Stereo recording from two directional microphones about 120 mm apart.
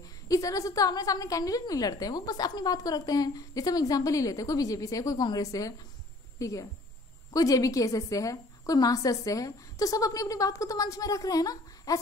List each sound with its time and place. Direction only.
0.3 s a woman's voice: 30° left (ahead or behind)